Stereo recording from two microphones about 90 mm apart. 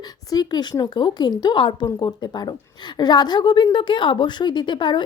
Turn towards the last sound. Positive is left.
turn(degrees=60)  # may be behind; listen again after turning